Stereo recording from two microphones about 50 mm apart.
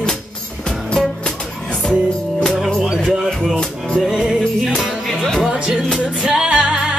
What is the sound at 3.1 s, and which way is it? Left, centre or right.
Music, centre.